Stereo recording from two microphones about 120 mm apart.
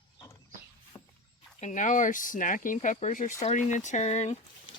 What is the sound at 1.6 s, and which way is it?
Speech, 90° left.